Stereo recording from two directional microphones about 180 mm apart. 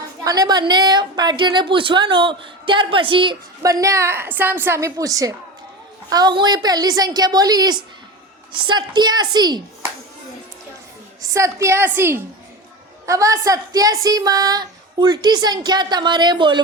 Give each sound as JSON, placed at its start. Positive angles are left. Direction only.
{"t": 0.3, "sound": "a woman's voice", "side_deg": -20}
{"t": 11.2, "sound": "a woman's voice", "side_deg": -15}